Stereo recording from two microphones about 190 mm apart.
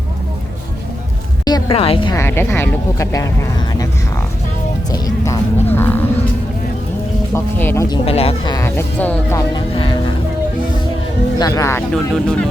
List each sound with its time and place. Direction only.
1.5 s speech: 25° left (ahead or behind)
2.1 s speech: 10° left (ahead or behind)
4.9 s speech: 20° left (ahead or behind)
7.3 s speech: 10° left (ahead or behind)
8.0 s speech: 30° left (ahead or behind)
8.5 s speech: 15° left (ahead or behind)
9.6 s speech: 25° left (ahead or behind)
11.3 s speech: 20° left (ahead or behind)
11.9 s speech: 5° left (ahead or behind)